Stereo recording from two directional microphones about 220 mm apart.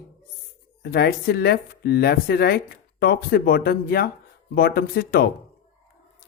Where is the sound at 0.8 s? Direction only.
45° left (ahead or behind).